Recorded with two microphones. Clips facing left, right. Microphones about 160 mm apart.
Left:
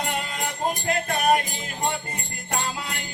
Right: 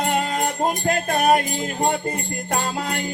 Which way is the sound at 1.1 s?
40° right (ahead or behind).